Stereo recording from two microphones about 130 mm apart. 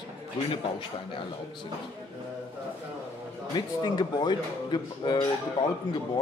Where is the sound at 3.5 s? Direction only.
35° left (ahead or behind).